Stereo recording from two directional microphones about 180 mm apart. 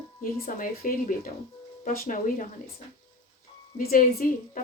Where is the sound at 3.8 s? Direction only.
55° left (ahead or behind).